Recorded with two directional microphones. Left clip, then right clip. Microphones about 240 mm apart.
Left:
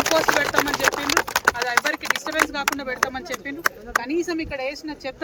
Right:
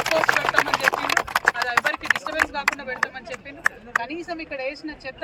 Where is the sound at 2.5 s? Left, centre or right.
Centre.